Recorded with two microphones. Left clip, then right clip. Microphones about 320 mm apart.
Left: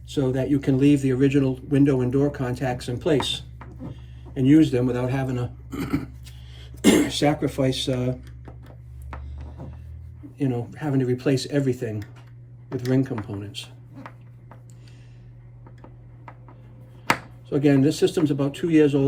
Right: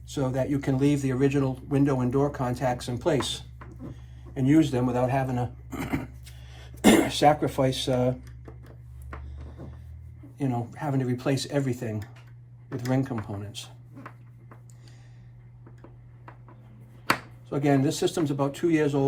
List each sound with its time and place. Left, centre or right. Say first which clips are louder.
0.1 s speech: left 4 dB; centre
6.5 s speech: left 1 dB; centre
10.3 s speech: left 3 dB; centre
17.5 s speech: left 5 dB; centre